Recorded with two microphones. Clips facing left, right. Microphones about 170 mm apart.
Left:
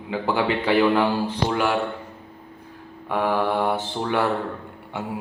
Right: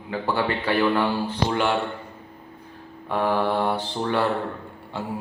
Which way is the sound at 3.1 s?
10° left (ahead or behind).